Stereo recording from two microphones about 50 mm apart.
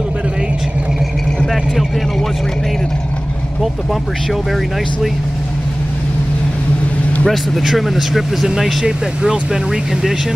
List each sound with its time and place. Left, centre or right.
1.5 s vehicle: centre
7.2 s speech: centre